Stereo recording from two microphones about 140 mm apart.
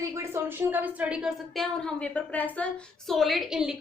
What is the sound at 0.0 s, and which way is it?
A woman's voice, 20° right (ahead or behind).